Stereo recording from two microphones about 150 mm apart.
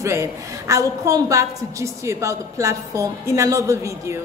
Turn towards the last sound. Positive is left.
turn(degrees=-20)  # may be behind; listen again after turning